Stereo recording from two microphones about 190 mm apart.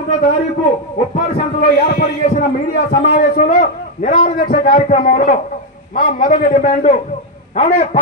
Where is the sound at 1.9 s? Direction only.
40° left (ahead or behind).